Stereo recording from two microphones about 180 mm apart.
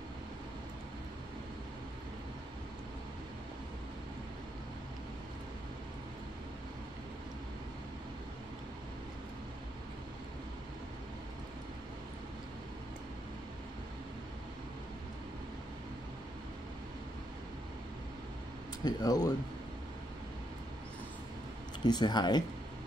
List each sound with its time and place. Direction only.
18.9 s speech: 20° left (ahead or behind)
21.8 s speech: 25° left (ahead or behind)